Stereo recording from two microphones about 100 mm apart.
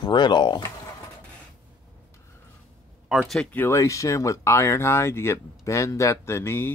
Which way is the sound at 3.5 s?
25° left (ahead or behind).